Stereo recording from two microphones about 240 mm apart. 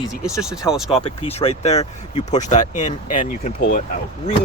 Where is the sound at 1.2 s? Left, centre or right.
Left.